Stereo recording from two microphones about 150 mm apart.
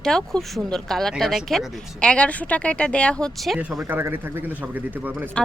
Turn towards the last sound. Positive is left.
turn(degrees=-10)  # may be behind; listen again after turning